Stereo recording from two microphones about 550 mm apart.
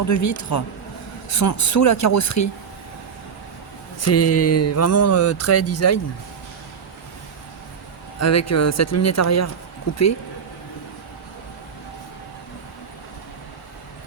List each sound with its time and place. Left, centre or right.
0.1 s speech: left
4.0 s speech: left
8.2 s speech: left